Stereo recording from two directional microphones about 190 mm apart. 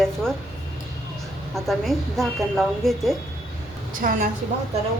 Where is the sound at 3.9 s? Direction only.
45° right (ahead or behind).